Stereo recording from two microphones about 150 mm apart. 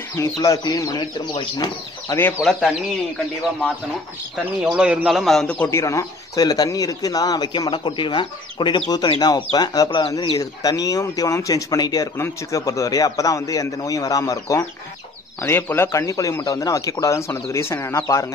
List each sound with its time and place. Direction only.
0.1 s a man's voice: 20° left (ahead or behind)
2.4 s speech: centre (ahead or behind)
4.6 s a man's voice: 10° right (ahead or behind); by 18.2 s 20° left (ahead or behind)